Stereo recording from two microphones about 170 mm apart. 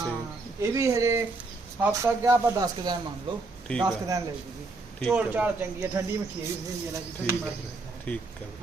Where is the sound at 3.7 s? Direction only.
5° left (ahead or behind).